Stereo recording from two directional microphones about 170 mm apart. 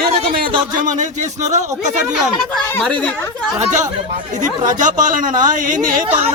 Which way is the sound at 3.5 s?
20° right (ahead or behind).